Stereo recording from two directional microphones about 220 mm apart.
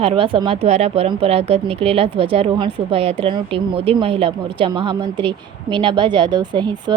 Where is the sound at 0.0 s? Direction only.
25° right (ahead or behind).